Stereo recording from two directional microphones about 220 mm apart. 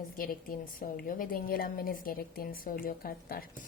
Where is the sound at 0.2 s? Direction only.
40° left (ahead or behind).